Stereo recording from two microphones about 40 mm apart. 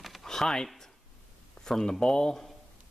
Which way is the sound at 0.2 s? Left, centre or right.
Centre.